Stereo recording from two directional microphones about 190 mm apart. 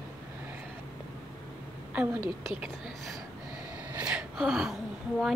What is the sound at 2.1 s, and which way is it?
Speech, 25° left (ahead or behind).